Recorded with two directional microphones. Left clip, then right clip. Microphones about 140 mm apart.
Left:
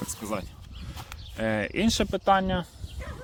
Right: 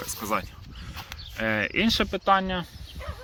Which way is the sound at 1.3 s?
20° left (ahead or behind).